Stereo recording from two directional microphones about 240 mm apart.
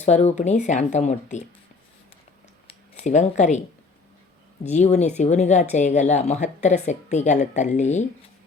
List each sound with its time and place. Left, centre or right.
0.0 s speech: left
2.6 s a sound: left
4.6 s speech: left